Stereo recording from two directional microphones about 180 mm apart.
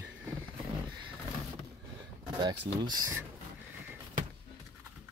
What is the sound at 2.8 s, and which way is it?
Speech, 20° right (ahead or behind).